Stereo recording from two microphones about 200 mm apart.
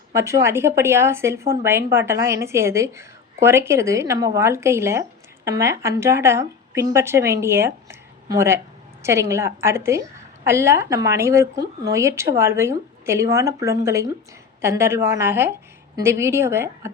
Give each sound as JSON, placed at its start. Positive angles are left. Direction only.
{"t": 0.1, "sound": "a woman's voice", "side_deg": -15}